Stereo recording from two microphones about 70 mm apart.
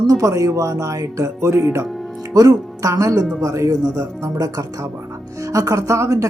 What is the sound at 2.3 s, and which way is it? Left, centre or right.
Speech, right.